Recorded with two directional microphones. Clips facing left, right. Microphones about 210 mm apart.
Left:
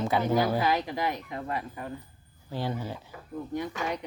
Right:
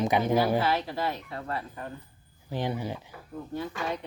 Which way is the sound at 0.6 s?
15° left (ahead or behind).